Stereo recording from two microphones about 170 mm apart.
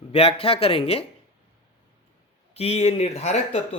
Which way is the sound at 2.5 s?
35° left (ahead or behind).